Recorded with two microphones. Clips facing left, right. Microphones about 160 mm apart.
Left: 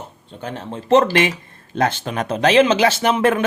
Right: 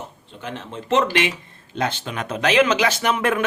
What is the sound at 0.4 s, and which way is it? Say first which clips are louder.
Speech: left 4 dB; 40° left (ahead or behind).